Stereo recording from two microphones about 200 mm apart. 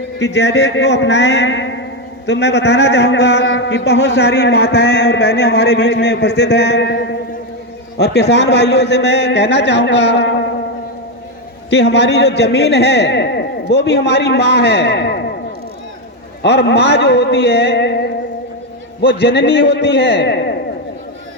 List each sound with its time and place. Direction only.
0.2 s a man's voice: 60° left (ahead or behind)
11.7 s a man's voice: 60° left (ahead or behind)
16.4 s a man's voice: 60° left (ahead or behind)
19.0 s a man's voice: 55° left (ahead or behind)